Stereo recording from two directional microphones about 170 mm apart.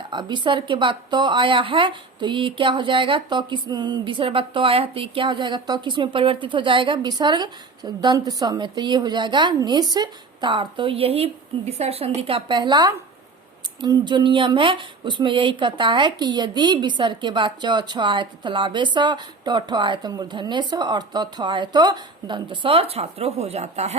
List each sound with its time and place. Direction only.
0.1 s speech: 25° right (ahead or behind)